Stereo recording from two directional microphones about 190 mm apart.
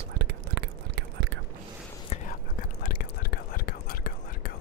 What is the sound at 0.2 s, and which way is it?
Whispering, 60° right (ahead or behind).